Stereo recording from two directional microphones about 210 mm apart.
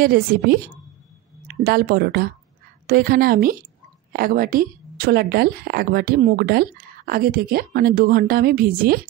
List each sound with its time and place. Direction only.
0.0 s a woman's voice: 45° right (ahead or behind)